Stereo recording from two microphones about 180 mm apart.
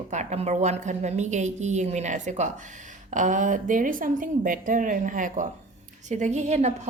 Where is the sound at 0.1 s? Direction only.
40° right (ahead or behind).